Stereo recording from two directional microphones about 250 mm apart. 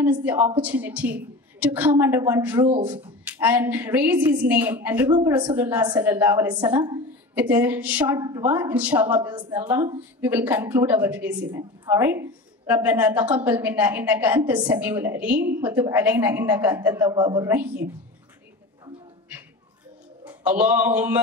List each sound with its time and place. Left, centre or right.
0.0 s a woman's voice: centre
6.5 s a woman's voice: centre
20.2 s a man's voice: centre